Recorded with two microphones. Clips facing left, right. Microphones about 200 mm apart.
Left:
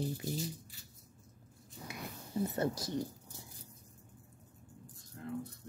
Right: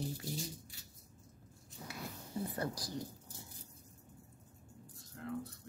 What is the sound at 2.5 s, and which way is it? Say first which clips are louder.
Speech: left 5 dB; 25° left (ahead or behind).